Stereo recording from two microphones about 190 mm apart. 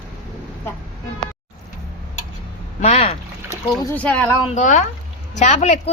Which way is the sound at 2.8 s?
35° left (ahead or behind).